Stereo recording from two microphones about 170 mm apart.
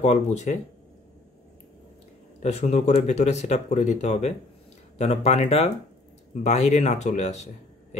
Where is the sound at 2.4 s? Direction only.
40° left (ahead or behind).